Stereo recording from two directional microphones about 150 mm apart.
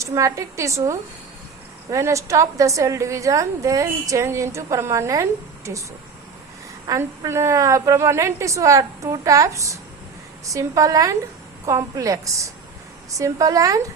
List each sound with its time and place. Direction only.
0.0 s a woman's voice: 20° right (ahead or behind)
6.8 s a woman's voice: 20° right (ahead or behind)